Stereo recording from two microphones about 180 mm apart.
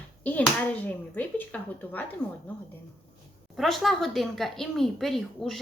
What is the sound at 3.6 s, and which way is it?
Speech, centre (ahead or behind).